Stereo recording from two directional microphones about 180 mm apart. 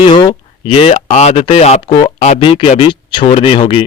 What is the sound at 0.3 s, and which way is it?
Speech, 30° left (ahead or behind).